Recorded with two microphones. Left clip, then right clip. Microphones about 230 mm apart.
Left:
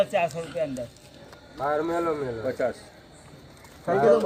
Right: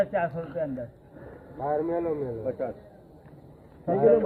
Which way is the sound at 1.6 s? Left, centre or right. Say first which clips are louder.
Left 2 dB; centre.